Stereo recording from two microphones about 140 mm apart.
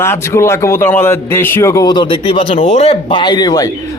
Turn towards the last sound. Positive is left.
turn(degrees=30)  # may be behind; listen again after turning